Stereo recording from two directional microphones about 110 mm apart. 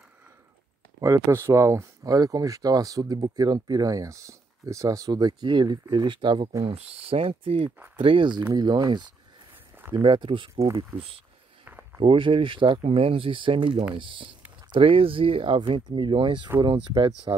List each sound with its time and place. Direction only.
1.0 s speech: 25° right (ahead or behind); by 6.5 s 50° right (ahead or behind)
6.7 s speech: 65° right (ahead or behind); by 9.1 s 40° right (ahead or behind)
9.8 s a sound: 20° right (ahead or behind)
10.0 s speech: 50° right (ahead or behind)
10.9 s speech: 15° right (ahead or behind)
11.6 s a sound: 15° right (ahead or behind)
12.0 s speech: 50° right (ahead or behind)
12.8 s speech: 60° right (ahead or behind)